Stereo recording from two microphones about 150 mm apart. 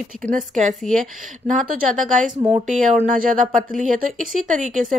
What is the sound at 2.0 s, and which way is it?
A woman's voice, 55° right (ahead or behind).